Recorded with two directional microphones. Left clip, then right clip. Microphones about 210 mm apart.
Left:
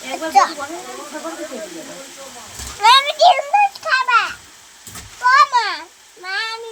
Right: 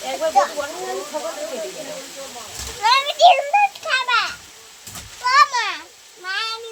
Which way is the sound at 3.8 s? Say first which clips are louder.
Left 4 dB; 20° left (ahead or behind).